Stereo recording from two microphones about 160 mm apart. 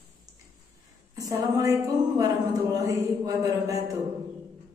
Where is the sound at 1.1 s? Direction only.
20° right (ahead or behind).